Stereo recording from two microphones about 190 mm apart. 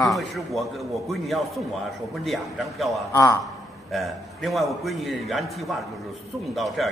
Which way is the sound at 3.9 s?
Centre (ahead or behind).